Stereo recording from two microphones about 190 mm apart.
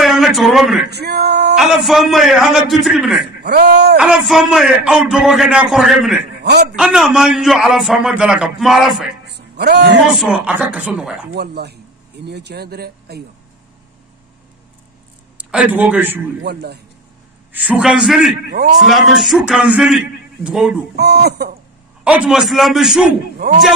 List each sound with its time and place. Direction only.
0.0 s a sound: centre (ahead or behind)
0.8 s male singing: 60° right (ahead or behind)
1.6 s a man's voice: centre (ahead or behind)
3.4 s speech: 60° right (ahead or behind)
4.0 s a man's voice: 5° right (ahead or behind)
9.6 s speech: 60° right (ahead or behind)
10.1 s a man's voice: 5° right (ahead or behind)
11.3 s speech: 60° right (ahead or behind)
15.3 s a man's voice: 5° right (ahead or behind)
16.4 s speech: 60° right (ahead or behind)
17.5 s a man's voice: 10° right (ahead or behind)
20.9 s speech: 60° right (ahead or behind)
22.0 s a man's voice: 5° right (ahead or behind)